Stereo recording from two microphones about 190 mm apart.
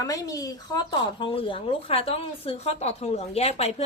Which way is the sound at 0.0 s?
20° left (ahead or behind).